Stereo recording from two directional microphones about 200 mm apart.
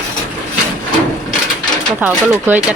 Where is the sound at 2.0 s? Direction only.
10° right (ahead or behind).